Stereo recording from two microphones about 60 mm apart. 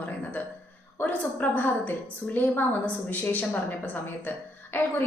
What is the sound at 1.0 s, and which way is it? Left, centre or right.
A woman's voice, left.